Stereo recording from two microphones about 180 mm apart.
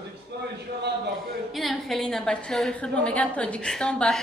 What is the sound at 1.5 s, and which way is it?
A woman's voice, centre (ahead or behind).